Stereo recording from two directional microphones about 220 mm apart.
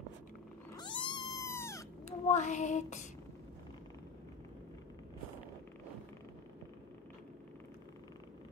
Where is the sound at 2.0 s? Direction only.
30° left (ahead or behind).